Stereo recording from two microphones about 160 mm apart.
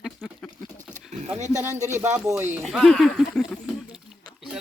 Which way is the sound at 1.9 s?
15° right (ahead or behind).